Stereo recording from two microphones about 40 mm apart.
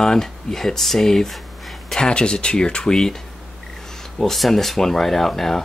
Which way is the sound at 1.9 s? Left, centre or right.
Left.